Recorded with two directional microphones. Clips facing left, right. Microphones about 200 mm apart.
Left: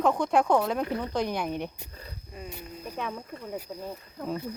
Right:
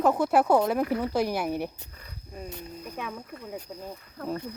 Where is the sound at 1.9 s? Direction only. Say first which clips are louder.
Left 4 dB; 30° left (ahead or behind).